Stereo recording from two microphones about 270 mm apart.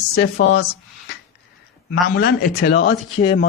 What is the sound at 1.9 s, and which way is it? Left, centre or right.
A man's voice, left.